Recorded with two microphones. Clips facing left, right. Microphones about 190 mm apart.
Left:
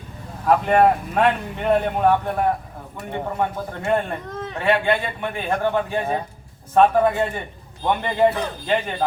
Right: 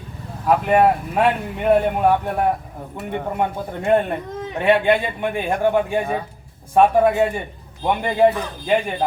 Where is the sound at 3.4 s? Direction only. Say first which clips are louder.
Right 1 dB; 15° right (ahead or behind).